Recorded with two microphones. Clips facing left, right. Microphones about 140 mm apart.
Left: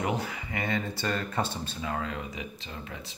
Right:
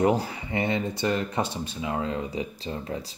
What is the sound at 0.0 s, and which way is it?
Speech, 35° right (ahead or behind).